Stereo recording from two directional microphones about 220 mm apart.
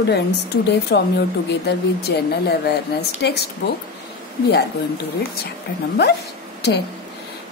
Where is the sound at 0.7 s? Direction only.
50° left (ahead or behind).